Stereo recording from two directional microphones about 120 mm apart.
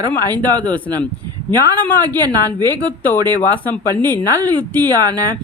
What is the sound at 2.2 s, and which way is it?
Speech, 35° right (ahead or behind).